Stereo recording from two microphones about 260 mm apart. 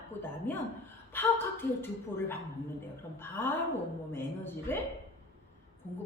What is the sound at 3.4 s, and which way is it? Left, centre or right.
A woman's voice, centre.